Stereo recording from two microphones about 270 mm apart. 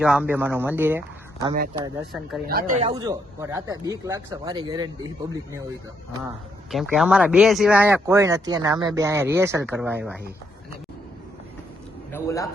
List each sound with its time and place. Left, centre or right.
0.0 s speech: centre
2.5 s speech: right
2.9 s speech: centre
6.7 s speech: centre
12.1 s a man's voice: centre